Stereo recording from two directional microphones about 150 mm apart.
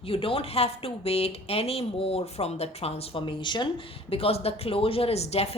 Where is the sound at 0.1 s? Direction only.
40° left (ahead or behind).